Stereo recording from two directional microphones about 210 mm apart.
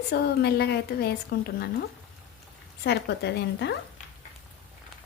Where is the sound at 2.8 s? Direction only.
55° left (ahead or behind).